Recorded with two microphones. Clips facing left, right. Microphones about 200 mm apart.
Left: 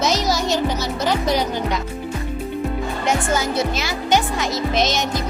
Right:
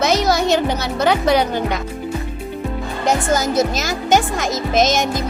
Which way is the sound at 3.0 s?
40° right (ahead or behind).